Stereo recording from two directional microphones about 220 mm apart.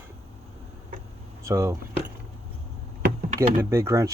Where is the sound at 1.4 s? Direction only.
15° right (ahead or behind).